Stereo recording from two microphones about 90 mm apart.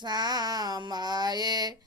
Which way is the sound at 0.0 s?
50° right (ahead or behind).